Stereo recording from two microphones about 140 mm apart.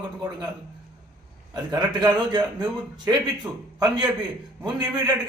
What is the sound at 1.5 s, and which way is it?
A man's voice, 30° right (ahead or behind).